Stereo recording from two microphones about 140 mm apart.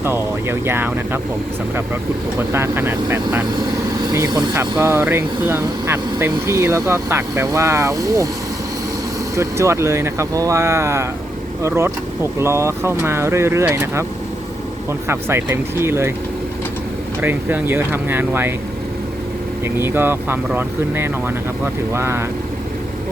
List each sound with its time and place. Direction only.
0.0 s speech: 15° right (ahead or behind)
2.5 s speech: 15° right (ahead or behind)
4.0 s speech: 25° right (ahead or behind)
4.8 s speech: 15° right (ahead or behind)
9.3 s speech: 20° right (ahead or behind)
15.0 s speech: 15° right (ahead or behind)
17.2 s speech: 15° right (ahead or behind)
19.6 s speech: 15° right (ahead or behind)